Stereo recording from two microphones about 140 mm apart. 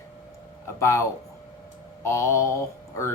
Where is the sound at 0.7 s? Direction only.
20° left (ahead or behind).